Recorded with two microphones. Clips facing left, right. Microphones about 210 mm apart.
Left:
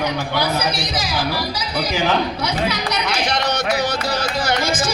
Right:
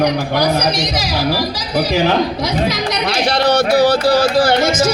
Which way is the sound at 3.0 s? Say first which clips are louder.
Right 8 dB; 35° right (ahead or behind).